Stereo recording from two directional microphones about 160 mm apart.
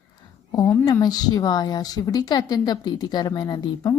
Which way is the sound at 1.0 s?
25° left (ahead or behind).